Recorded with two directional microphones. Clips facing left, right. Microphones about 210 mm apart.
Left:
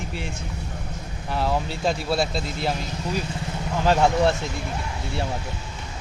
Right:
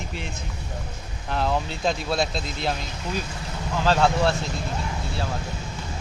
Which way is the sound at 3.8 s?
15° left (ahead or behind).